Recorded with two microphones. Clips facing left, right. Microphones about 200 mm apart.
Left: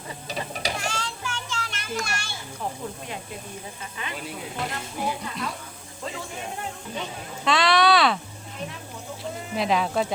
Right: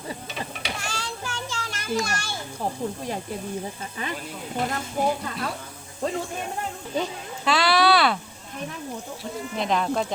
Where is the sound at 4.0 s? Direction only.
40° right (ahead or behind).